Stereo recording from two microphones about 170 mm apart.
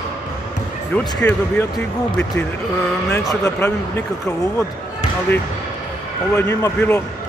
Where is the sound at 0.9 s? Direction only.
10° left (ahead or behind).